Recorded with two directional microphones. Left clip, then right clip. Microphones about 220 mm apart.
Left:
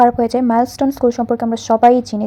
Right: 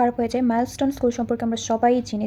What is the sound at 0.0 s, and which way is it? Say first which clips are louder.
A woman's voice: left 9 dB; 15° left (ahead or behind).